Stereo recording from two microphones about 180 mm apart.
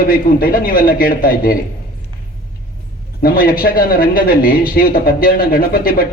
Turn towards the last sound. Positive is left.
turn(degrees=55)  # may be behind; listen again after turning